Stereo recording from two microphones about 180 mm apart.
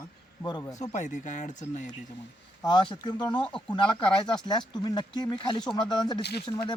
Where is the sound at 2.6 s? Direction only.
25° left (ahead or behind).